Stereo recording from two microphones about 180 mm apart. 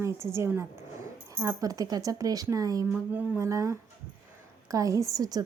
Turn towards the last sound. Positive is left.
turn(degrees=-20)  # may be behind; listen again after turning